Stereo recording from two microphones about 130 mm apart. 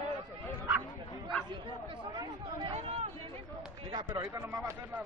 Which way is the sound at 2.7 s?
50° right (ahead or behind).